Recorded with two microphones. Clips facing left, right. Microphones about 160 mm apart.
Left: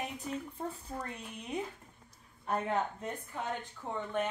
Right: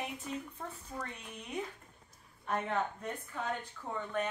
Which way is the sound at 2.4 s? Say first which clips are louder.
Left 2 dB; 30° left (ahead or behind).